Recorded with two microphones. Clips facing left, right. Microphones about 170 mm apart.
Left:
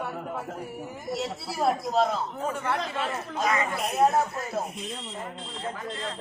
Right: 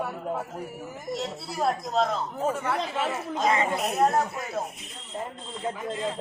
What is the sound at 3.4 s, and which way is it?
Speech, 25° right (ahead or behind).